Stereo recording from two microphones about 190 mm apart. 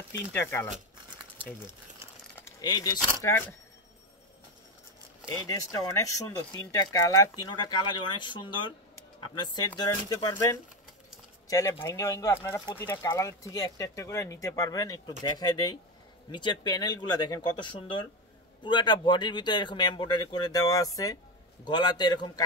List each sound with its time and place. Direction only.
0.3 s speech: 10° left (ahead or behind)
2.6 s speech: 20° left (ahead or behind)
5.5 s speech: 20° left (ahead or behind)